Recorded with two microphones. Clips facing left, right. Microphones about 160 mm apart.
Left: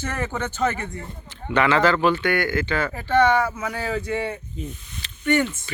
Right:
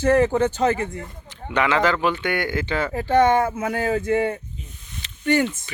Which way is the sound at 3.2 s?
45° right (ahead or behind).